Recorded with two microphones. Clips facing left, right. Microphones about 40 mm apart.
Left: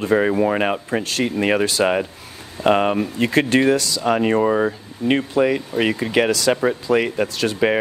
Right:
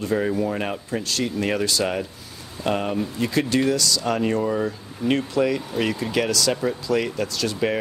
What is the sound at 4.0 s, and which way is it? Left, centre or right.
Speech, left.